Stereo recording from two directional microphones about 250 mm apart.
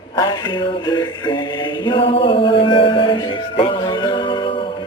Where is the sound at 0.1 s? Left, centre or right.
Centre.